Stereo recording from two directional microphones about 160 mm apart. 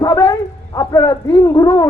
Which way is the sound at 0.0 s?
20° left (ahead or behind).